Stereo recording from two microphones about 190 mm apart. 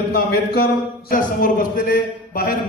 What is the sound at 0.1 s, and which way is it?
A man's voice, 55° left (ahead or behind).